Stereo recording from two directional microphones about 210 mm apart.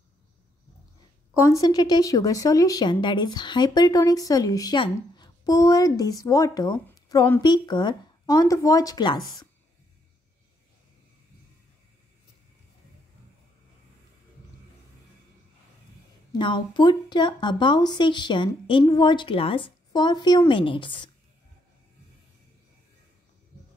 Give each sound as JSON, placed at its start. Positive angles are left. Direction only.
{"t": 1.4, "sound": "speech", "side_deg": 15}
{"t": 16.3, "sound": "a woman's voice", "side_deg": 20}